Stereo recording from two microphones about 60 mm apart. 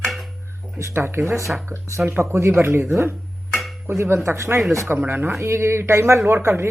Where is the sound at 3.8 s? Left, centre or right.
Right.